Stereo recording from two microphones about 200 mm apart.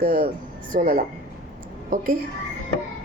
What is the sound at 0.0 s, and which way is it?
A woman's voice, 45° right (ahead or behind).